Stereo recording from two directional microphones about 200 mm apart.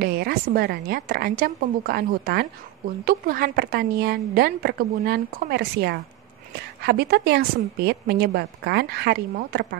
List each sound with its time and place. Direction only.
0.0 s a woman's voice: 50° right (ahead or behind)